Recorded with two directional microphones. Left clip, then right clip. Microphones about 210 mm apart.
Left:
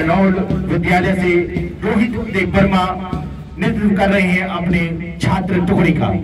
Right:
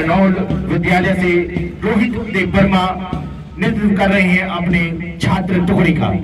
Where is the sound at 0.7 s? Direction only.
55° left (ahead or behind).